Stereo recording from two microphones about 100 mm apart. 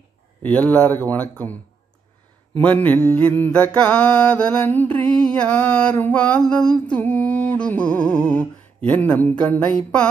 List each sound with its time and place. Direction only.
0.4 s mantra: 15° left (ahead or behind)